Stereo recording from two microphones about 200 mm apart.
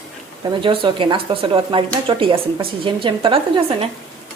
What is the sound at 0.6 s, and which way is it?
Speech, 25° right (ahead or behind).